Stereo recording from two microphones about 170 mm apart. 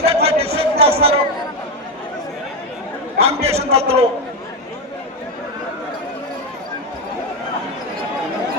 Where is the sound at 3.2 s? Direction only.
35° right (ahead or behind).